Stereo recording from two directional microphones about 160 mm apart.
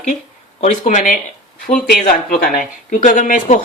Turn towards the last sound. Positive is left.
turn(degrees=55)  # may be behind; listen again after turning